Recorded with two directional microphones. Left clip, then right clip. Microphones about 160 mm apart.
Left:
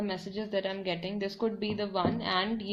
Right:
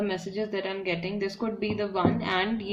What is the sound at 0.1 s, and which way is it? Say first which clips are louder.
Speech: right 3 dB; 40° left (ahead or behind).